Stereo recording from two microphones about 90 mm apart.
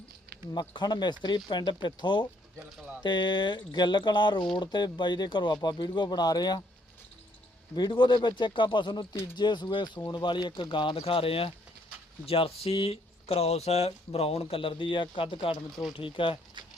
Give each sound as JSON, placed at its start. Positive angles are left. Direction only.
{"t": 0.7, "sound": "speech", "side_deg": 55}
{"t": 7.8, "sound": "speech", "side_deg": 55}
{"t": 15.7, "sound": "speech", "side_deg": 0}
{"t": 16.0, "sound": "speech", "side_deg": 70}